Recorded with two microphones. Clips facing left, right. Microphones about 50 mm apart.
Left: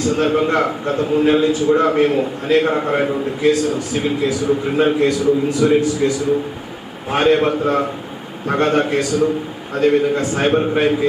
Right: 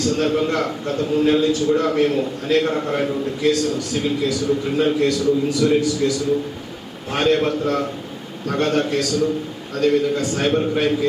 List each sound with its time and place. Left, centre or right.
0.0 s a man's voice: centre